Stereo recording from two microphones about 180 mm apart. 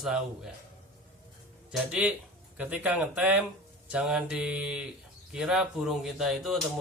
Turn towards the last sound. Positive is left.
turn(degrees=0)  # may be behind; listen again after turning